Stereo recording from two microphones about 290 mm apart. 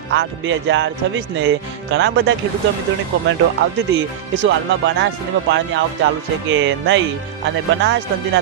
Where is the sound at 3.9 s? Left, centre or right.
Right.